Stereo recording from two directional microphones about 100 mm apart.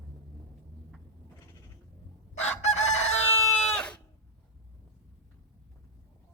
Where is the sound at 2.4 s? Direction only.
90° left.